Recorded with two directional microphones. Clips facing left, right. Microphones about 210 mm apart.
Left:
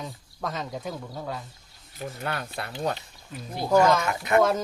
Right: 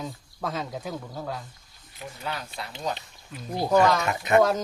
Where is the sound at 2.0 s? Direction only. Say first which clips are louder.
Left 3 dB; 50° left (ahead or behind).